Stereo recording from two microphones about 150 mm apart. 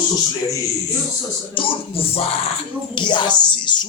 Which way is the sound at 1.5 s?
35° left (ahead or behind).